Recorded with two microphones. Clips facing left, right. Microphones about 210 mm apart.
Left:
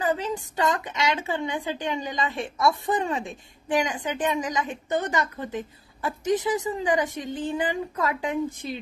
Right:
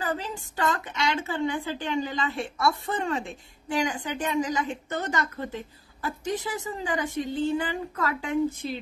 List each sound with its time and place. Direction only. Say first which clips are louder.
0.1 s a woman's voice: left 5 dB; 15° left (ahead or behind)